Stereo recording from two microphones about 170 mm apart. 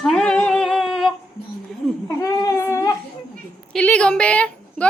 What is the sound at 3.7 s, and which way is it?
A woman's voice, 5° left (ahead or behind).